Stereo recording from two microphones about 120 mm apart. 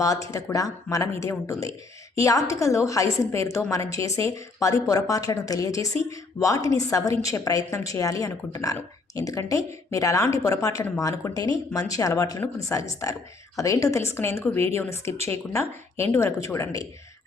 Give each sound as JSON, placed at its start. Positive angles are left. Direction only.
{"t": 0.0, "sound": "a woman's voice", "side_deg": 30}